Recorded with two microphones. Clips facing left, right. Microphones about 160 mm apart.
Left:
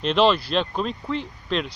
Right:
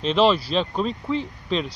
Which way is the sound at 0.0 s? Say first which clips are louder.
Even; centre (ahead or behind).